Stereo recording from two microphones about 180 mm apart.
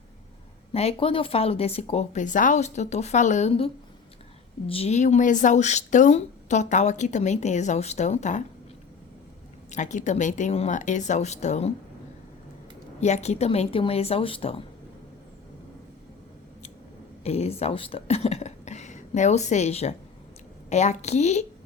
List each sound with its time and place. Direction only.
0.7 s speech: 35° left (ahead or behind)
9.7 s speech: 40° left (ahead or behind)
13.0 s speech: 40° left (ahead or behind)
17.2 s speech: 35° left (ahead or behind)